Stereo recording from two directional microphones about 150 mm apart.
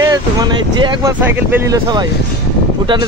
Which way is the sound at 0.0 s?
25° right (ahead or behind).